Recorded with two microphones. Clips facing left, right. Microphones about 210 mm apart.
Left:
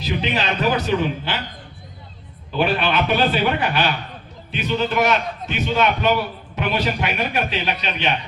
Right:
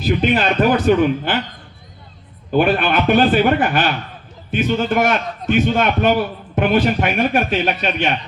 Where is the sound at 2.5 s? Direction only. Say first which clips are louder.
Right 5 dB; 50° right (ahead or behind).